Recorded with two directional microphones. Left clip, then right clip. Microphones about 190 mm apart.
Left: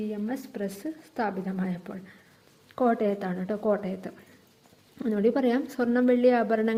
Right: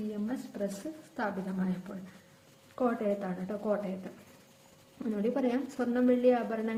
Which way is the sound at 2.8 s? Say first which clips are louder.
Left 6 dB; 35° left (ahead or behind).